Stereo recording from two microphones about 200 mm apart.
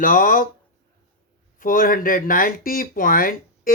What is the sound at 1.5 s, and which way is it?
Speech, 45° left (ahead or behind).